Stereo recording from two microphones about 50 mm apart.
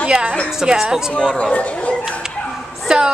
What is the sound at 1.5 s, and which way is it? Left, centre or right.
Speech, left.